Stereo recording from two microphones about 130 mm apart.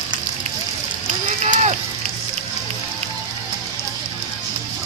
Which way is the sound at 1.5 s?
60° right (ahead or behind).